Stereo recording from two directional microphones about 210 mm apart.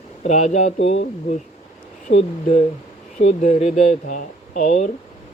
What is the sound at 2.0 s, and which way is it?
Speech, 30° left (ahead or behind).